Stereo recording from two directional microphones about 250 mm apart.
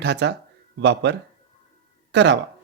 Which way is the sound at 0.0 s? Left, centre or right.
Right.